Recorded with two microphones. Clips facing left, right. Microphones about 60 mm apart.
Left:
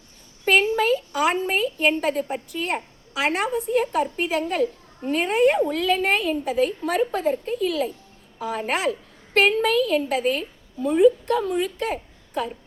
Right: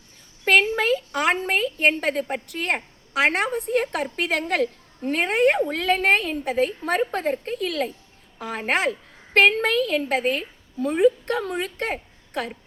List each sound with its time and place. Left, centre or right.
0.4 s a woman's voice: right
5.1 s a woman's voice: right